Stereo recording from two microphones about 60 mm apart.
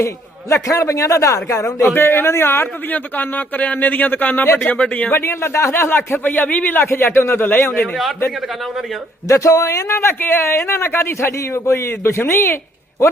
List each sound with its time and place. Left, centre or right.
0.5 s speech: left
1.9 s speech: left
2.9 s speech: left
5.1 s speech: left
6.8 s speech: left
9.2 s speech: left
9.9 s speech: left